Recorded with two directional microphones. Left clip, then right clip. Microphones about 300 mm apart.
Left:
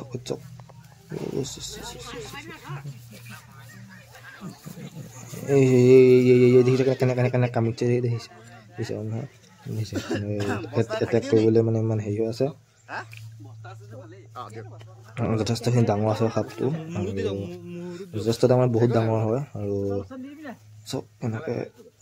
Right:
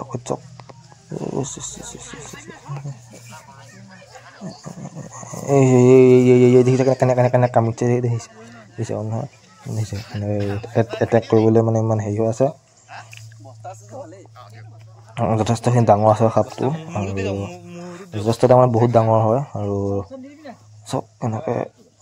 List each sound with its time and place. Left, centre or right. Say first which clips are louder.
0.0 s a sound: right 6 dB; centre
1.4 s speech: right 3 dB; centre
5.1 s speech: right 4 dB; centre
9.9 s a man's voice: right 2 dB; left
11.0 s speech: right 5 dB; centre
15.1 s speech: right 7 dB; centre
17.9 s speech: right 4 dB; centre
20.9 s speech: right 7 dB; centre